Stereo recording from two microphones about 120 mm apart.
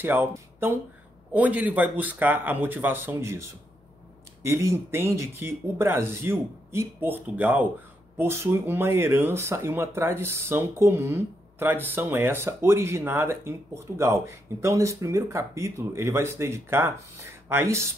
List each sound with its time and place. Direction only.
0.0 s speech: 20° right (ahead or behind)